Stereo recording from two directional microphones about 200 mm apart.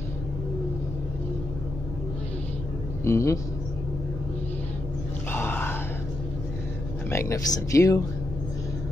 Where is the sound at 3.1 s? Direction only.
15° left (ahead or behind).